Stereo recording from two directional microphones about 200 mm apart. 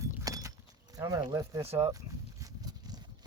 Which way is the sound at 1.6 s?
30° right (ahead or behind).